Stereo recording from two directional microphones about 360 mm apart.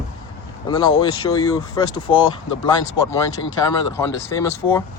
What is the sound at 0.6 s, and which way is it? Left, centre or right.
Speech, centre.